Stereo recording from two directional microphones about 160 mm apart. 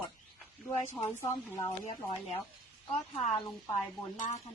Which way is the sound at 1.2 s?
15° left (ahead or behind).